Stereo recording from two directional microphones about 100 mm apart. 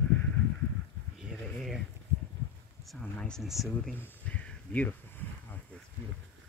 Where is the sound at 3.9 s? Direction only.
20° left (ahead or behind).